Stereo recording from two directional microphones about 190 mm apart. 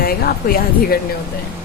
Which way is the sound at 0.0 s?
50° left (ahead or behind).